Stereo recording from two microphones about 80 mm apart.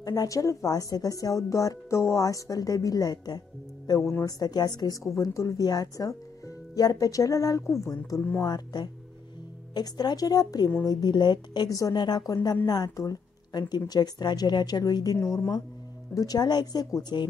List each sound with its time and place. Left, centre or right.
0.0 s a woman's voice: left
5.1 s a woman's voice: left
8.4 s a woman's voice: left
13.5 s a woman's voice: left
15.1 s a woman's voice: left
16.2 s a woman's voice: left